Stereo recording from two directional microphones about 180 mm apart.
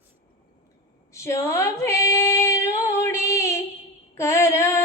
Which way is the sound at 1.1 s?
15° left (ahead or behind).